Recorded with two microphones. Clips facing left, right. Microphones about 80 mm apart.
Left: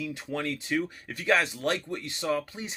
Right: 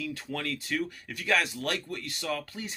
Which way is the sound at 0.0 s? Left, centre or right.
Left.